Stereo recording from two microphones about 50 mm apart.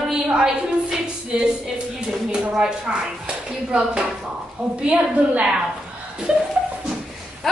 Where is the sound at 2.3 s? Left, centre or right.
Centre.